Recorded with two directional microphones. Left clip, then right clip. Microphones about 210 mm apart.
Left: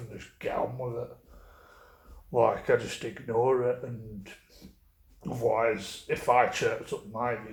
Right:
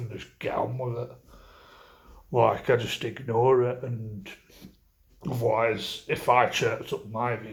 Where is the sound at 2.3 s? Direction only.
35° right (ahead or behind).